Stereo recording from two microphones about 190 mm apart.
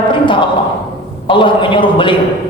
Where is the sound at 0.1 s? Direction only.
25° left (ahead or behind).